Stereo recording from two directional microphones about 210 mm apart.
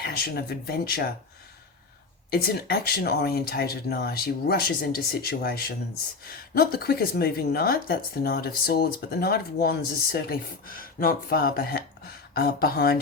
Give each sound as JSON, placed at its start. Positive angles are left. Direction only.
{"t": 0.0, "sound": "speech", "side_deg": 50}
{"t": 2.3, "sound": "speech", "side_deg": 45}